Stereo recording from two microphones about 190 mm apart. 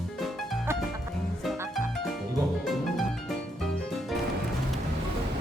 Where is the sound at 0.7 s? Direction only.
15° right (ahead or behind).